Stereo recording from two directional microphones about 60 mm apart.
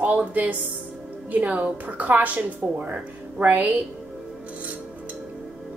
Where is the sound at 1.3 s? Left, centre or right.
Right.